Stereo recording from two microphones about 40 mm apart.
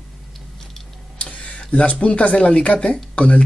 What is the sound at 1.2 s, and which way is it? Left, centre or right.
Speech, left.